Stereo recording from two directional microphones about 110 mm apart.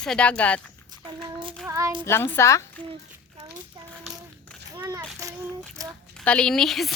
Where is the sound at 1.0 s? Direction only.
50° right (ahead or behind).